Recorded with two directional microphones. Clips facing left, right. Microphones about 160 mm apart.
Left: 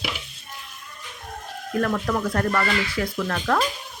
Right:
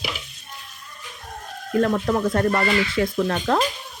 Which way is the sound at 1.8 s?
25° right (ahead or behind).